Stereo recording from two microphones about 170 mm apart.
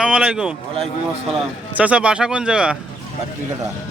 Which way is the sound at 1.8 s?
10° right (ahead or behind).